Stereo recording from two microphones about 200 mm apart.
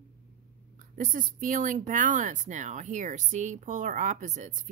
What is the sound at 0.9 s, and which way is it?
Speech, 40° right (ahead or behind).